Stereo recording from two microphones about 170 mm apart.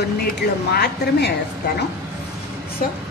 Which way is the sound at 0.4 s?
75° left (ahead or behind).